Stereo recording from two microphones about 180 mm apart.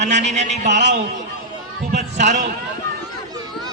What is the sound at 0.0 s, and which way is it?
Speech, 40° right (ahead or behind).